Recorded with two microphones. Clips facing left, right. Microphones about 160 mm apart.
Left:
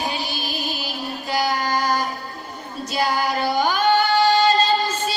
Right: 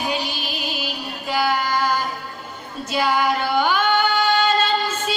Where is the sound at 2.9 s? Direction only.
40° left (ahead or behind).